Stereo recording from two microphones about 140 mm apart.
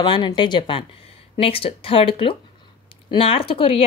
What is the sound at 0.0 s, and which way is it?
A woman's voice, 35° left (ahead or behind).